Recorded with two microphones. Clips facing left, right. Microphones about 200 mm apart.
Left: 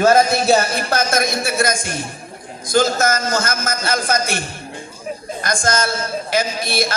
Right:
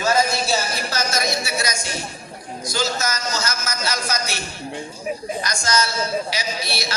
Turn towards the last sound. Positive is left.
turn(degrees=50)  # may be behind; listen again after turning